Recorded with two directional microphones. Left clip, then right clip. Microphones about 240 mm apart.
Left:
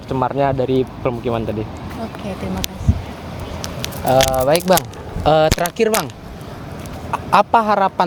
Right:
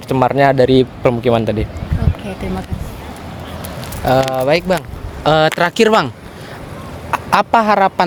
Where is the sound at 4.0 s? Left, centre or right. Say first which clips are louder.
Even; right.